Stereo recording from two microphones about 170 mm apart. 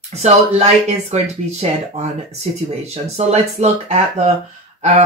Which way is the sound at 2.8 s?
40° right (ahead or behind).